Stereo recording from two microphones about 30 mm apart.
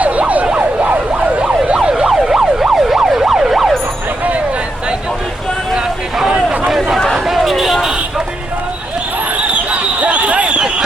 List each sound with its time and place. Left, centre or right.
0.0 s emergency vehicle: right
0.5 s emergency vehicle: right
1.7 s emergency vehicle: right
2.0 s emergency vehicle: centre
7.3 s a sound: centre
9.7 s basketball bounce: right